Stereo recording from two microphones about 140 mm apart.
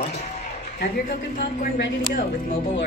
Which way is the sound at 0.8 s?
90° left.